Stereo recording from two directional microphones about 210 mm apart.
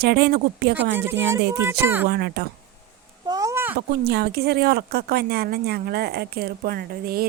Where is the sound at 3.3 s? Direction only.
15° right (ahead or behind).